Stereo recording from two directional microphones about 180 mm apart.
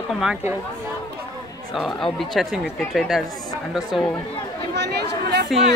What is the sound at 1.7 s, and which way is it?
Speech, centre (ahead or behind).